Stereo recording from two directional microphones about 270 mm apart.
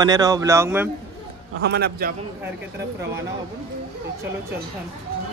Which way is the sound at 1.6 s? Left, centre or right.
Right.